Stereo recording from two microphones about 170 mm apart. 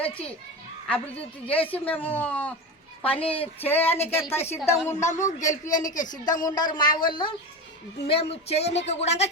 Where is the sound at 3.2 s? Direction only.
30° left (ahead or behind).